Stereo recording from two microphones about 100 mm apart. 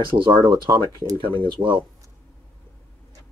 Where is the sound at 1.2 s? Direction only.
55° right (ahead or behind).